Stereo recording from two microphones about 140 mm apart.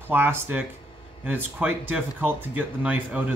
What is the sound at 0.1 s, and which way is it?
Speech, 15° right (ahead or behind).